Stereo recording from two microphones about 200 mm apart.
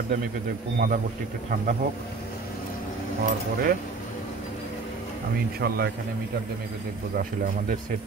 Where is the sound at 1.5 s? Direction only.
45° right (ahead or behind).